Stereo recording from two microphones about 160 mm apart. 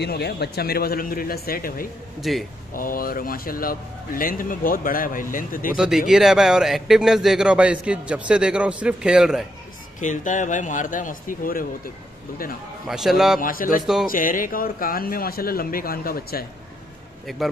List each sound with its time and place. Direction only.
0.0 s speech: 90° left; by 1.9 s 65° left (ahead or behind)
2.3 s speech: centre (ahead or behind)
2.7 s speech: 60° left (ahead or behind)
5.8 s speech: 5° right (ahead or behind)
9.9 s speech: 50° left (ahead or behind)
12.8 s speech: centre (ahead or behind)
13.4 s speech: 60° left (ahead or behind)
17.3 s speech: centre (ahead or behind)